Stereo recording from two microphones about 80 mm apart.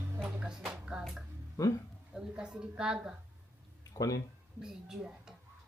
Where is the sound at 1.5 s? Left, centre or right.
Left.